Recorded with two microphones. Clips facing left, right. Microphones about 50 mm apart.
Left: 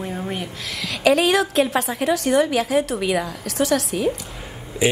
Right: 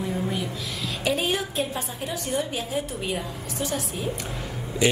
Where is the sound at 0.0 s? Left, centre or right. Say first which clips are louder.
Even; left.